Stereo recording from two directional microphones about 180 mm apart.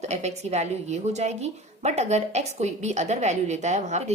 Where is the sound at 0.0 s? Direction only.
40° right (ahead or behind).